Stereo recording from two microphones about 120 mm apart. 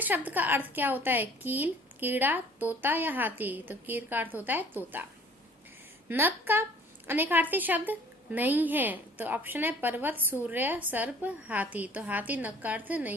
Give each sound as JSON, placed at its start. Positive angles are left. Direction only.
{"t": 0.0, "sound": "a woman's voice", "side_deg": -15}
{"t": 6.1, "sound": "a woman's voice", "side_deg": -15}